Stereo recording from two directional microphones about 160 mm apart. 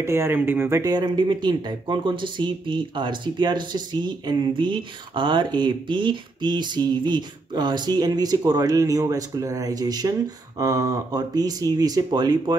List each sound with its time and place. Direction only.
0.0 s speech: 15° right (ahead or behind)